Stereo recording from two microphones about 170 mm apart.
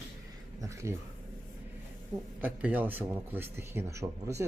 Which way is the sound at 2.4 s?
10° right (ahead or behind).